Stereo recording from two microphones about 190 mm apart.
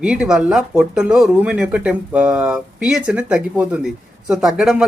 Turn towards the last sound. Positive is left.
turn(degrees=-5)  # may be behind; listen again after turning